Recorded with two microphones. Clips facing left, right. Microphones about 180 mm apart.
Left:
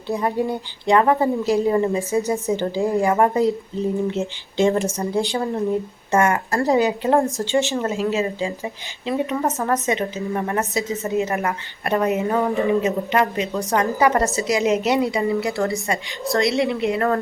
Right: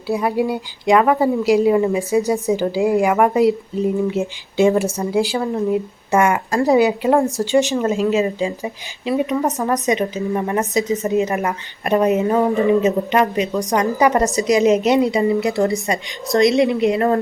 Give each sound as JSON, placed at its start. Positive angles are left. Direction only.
{"t": 0.1, "sound": "a woman's voice", "side_deg": -10}